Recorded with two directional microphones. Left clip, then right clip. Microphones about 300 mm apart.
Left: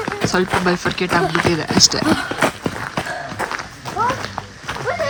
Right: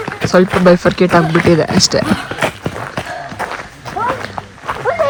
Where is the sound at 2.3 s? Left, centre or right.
Left.